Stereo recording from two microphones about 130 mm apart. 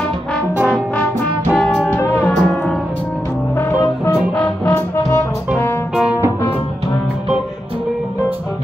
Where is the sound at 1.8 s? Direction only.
15° left (ahead or behind).